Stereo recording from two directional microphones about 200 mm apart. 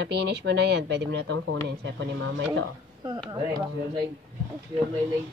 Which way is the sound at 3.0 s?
20° right (ahead or behind).